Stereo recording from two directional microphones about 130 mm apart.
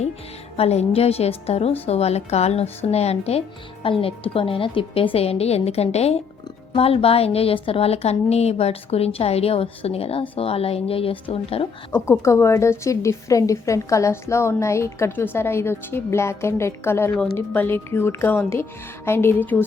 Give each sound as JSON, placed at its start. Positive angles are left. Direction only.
{"t": 0.5, "sound": "a woman's voice", "side_deg": 55}
{"t": 12.2, "sound": "a woman's voice", "side_deg": 20}